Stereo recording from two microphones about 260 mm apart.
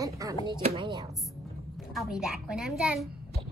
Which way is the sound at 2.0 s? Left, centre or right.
Centre.